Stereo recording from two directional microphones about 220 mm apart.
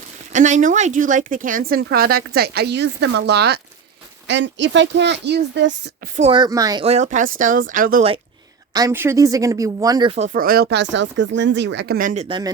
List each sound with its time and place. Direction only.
0.3 s speech: 35° right (ahead or behind); by 5.7 s 50° right (ahead or behind)
6.1 s a woman's voice: 25° right (ahead or behind)
8.7 s speech: 15° right (ahead or behind); by 12.4 s 30° right (ahead or behind)